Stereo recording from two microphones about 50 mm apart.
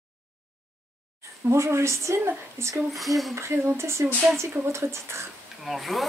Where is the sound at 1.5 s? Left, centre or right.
Right.